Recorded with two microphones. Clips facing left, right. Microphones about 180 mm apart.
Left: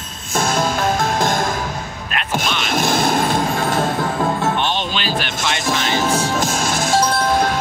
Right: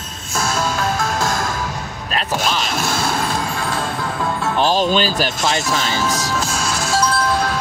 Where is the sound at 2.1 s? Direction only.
35° right (ahead or behind).